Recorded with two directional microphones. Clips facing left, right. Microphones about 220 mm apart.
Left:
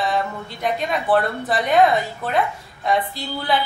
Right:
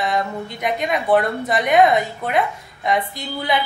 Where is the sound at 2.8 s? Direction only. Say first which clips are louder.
Even; 15° right (ahead or behind).